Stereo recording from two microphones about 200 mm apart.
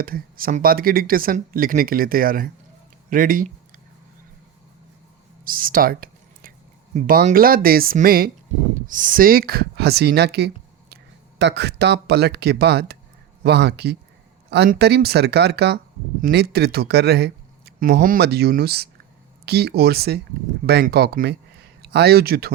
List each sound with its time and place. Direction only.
0.0 s speech: 45° right (ahead or behind)
5.5 s speech: 45° right (ahead or behind)